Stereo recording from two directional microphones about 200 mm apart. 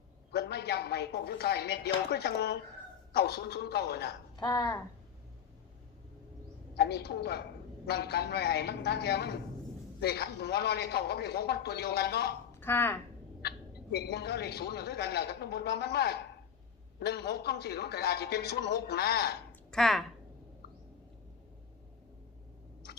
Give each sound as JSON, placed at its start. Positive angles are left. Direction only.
{"t": 0.3, "sound": "a man's voice", "side_deg": 55}
{"t": 4.4, "sound": "speech", "side_deg": 20}
{"t": 6.7, "sound": "a man's voice", "side_deg": 55}
{"t": 12.5, "sound": "a sound", "side_deg": 10}
{"t": 13.9, "sound": "a man's voice", "side_deg": 55}
{"t": 19.7, "sound": "speech", "side_deg": 0}